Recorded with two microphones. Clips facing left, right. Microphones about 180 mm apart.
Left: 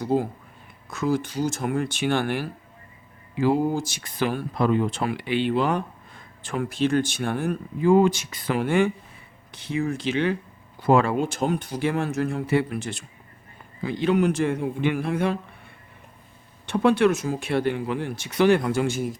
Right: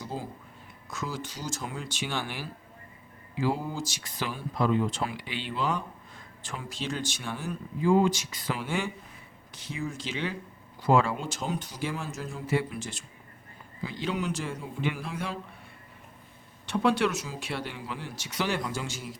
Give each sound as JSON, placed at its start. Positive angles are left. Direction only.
{"t": 0.0, "sound": "speech", "side_deg": 60}
{"t": 16.6, "sound": "speech", "side_deg": 55}